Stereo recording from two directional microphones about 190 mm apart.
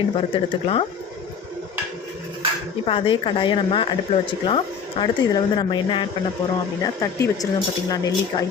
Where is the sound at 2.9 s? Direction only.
25° left (ahead or behind).